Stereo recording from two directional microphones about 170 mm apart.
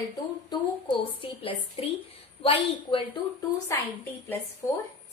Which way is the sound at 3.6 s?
15° left (ahead or behind).